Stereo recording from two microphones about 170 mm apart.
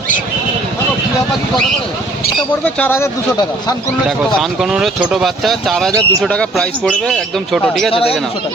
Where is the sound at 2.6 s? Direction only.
10° left (ahead or behind).